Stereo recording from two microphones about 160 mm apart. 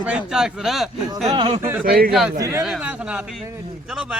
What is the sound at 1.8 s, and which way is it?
Speech, 70° right (ahead or behind).